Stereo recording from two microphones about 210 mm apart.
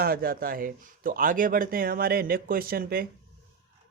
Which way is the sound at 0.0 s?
45° right (ahead or behind).